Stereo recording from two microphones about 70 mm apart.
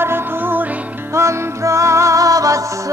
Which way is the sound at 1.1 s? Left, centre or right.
Right.